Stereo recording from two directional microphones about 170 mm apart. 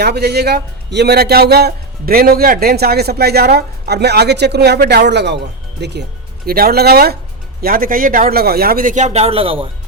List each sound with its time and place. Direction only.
0.0 s a man's voice: 70° right (ahead or behind); by 9.6 s 35° right (ahead or behind)